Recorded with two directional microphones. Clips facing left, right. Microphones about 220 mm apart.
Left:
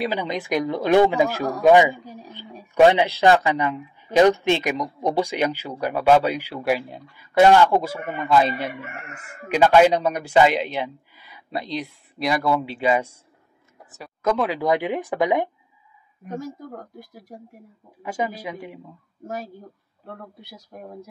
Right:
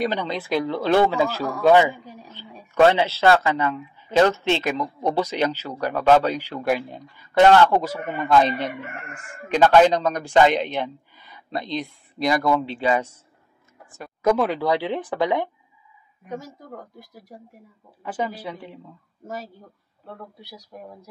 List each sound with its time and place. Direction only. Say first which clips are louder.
0.0 s speech: even; 10° left (ahead or behind)
14.2 s speech: right 2 dB; 10° right (ahead or behind)
14.6 s speech: left 1 dB; 15° left (ahead or behind)
18.0 s speech: left 1 dB; 10° left (ahead or behind)
20.3 s speech: even; 50° left (ahead or behind)